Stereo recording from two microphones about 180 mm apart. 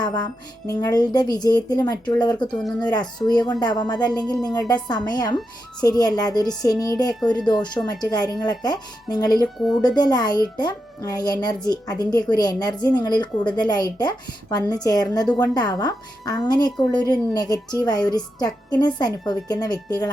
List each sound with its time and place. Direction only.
0.0 s music: 20° left (ahead or behind)
0.7 s a woman's voice: 20° left (ahead or behind)